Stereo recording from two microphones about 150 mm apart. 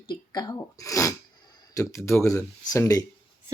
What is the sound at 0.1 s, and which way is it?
Speech, 25° left (ahead or behind).